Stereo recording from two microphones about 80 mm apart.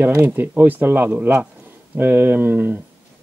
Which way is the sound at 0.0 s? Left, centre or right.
Right.